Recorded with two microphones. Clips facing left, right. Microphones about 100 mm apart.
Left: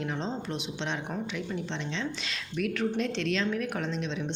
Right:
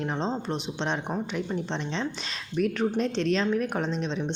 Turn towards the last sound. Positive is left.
turn(degrees=-35)  # may be behind; listen again after turning